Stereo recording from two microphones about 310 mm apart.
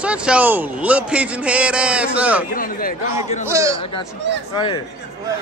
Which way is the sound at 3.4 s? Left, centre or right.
Centre.